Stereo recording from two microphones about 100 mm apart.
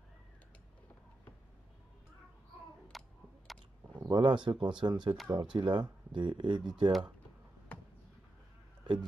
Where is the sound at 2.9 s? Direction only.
Centre (ahead or behind).